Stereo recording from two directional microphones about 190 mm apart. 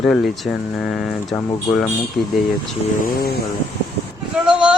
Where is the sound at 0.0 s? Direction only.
Centre (ahead or behind).